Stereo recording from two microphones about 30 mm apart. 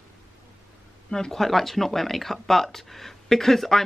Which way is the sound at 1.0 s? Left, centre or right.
Centre.